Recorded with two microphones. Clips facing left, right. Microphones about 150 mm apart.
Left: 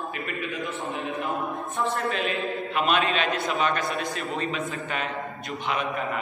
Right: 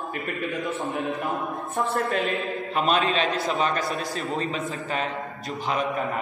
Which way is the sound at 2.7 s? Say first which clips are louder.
Right 2 dB; 35° right (ahead or behind).